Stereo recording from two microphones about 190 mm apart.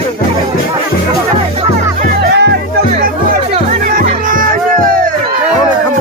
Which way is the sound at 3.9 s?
45° right (ahead or behind).